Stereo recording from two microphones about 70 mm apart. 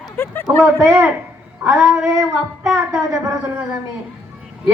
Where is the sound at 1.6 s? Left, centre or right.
Centre.